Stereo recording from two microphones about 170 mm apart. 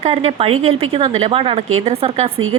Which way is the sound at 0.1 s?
35° right (ahead or behind).